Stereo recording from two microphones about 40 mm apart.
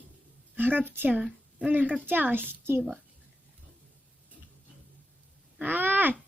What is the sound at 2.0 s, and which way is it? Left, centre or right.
Speech, right.